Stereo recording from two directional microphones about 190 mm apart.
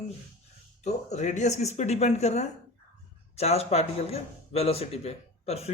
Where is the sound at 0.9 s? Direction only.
35° left (ahead or behind).